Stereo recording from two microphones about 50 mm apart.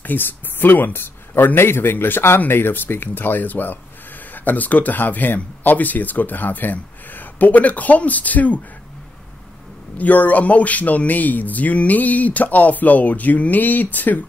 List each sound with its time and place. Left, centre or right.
0.0 s speech: left
9.9 s speech: left